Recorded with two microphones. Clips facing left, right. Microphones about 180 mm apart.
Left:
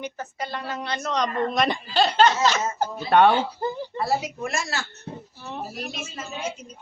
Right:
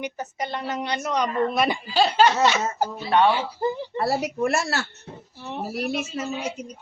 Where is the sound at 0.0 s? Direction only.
20° right (ahead or behind).